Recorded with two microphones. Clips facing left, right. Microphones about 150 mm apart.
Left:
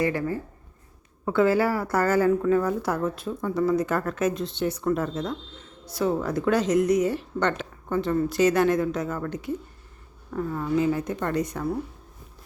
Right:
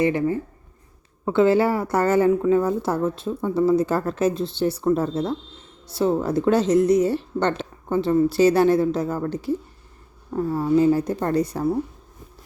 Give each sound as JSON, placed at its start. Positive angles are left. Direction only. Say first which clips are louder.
{"t": 0.0, "sound": "a woman's voice", "louder": "right 5 dB", "side_deg": -20}